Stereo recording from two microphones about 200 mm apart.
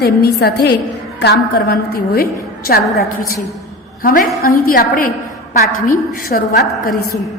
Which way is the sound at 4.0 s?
45° left (ahead or behind).